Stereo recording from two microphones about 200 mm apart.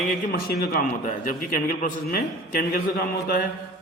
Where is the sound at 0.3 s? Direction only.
50° left (ahead or behind).